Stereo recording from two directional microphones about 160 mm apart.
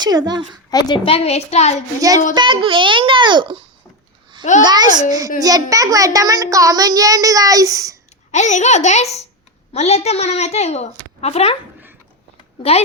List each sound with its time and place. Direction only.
0.0 s a child's voice: 25° right (ahead or behind)
0.7 s a woman's voice: 25° left (ahead or behind); by 1.8 s 40° left (ahead or behind)
2.0 s a child's voice: 20° right (ahead or behind)
4.6 s a child's voice: 25° right (ahead or behind)
8.3 s a child's voice: 45° left (ahead or behind)